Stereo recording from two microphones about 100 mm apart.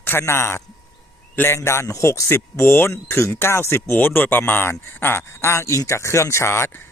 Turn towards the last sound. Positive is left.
turn(degrees=25)  # may be behind; listen again after turning